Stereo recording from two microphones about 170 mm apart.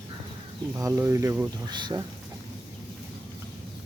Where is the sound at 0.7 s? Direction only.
15° right (ahead or behind).